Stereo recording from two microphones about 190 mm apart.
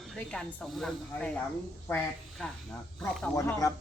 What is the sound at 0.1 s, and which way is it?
Speech, 5° left (ahead or behind).